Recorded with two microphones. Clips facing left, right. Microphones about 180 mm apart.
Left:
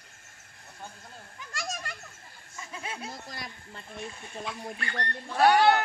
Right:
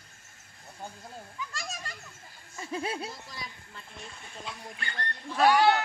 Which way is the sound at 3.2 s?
60° left (ahead or behind).